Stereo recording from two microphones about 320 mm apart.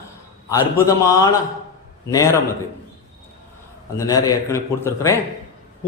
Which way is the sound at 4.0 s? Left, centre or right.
Centre.